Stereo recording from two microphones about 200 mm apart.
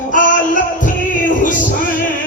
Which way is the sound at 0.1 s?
40° left (ahead or behind).